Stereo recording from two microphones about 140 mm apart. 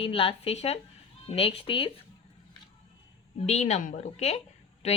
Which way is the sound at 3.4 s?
55° left (ahead or behind).